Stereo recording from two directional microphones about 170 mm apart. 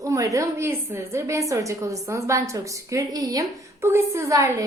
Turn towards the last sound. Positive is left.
turn(degrees=-20)  # may be behind; listen again after turning